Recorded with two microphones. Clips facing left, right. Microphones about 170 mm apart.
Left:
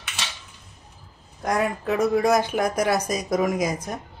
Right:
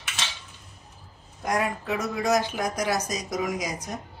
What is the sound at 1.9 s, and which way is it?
Speech, 55° left (ahead or behind).